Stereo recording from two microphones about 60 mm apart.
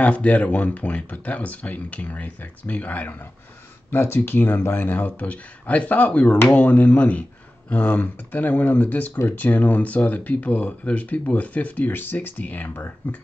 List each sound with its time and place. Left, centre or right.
0.0 s speech: left
3.9 s speech: left
12.6 s speech: left